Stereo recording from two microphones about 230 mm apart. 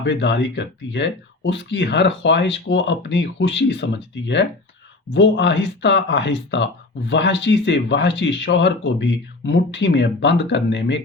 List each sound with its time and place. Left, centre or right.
0.0 s speech: left